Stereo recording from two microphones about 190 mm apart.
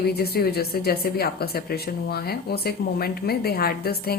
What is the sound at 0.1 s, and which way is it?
A woman's voice, 55° left (ahead or behind).